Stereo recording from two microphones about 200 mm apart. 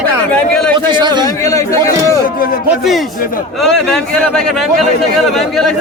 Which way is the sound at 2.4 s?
45° left (ahead or behind).